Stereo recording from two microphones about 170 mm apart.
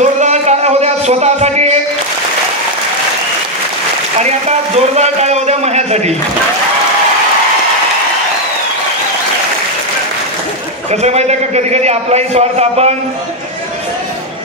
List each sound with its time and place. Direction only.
0.0 s music: 45° right (ahead or behind)
4.2 s a sound: 40° right (ahead or behind)
10.9 s a man's voice: 40° right (ahead or behind)